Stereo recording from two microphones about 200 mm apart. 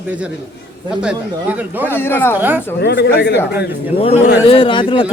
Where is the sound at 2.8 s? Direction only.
55° left (ahead or behind).